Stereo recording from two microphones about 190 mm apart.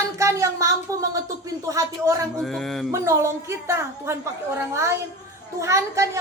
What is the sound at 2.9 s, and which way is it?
A woman's voice, 15° right (ahead or behind).